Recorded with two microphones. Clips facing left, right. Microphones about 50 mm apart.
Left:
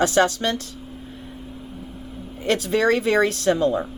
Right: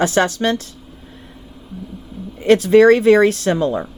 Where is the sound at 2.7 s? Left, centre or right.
Right.